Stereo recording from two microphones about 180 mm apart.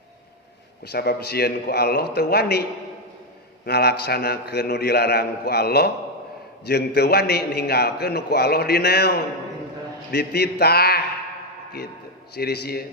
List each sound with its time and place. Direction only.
0.9 s a man's voice: 60° left (ahead or behind)
3.7 s a man's voice: 60° left (ahead or behind)
12.3 s a man's voice: 60° left (ahead or behind)